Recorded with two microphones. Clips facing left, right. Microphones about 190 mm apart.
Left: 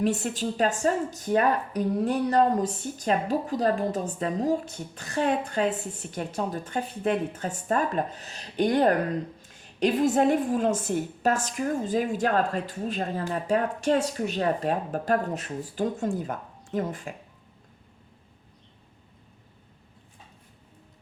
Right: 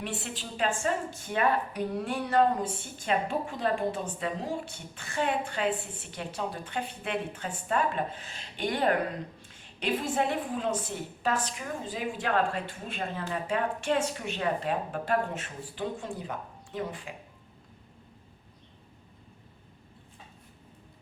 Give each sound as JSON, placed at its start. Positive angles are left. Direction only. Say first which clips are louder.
{"t": 0.0, "sound": "a woman's voice", "louder": "left 11 dB", "side_deg": 45}